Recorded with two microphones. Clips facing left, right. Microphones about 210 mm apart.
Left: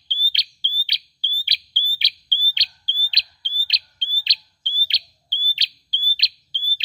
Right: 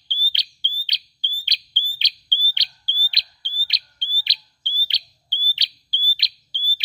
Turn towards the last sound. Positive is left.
turn(degrees=20)  # may be behind; listen again after turning